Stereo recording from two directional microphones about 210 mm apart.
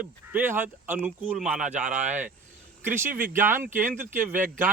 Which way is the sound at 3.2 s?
10° right (ahead or behind).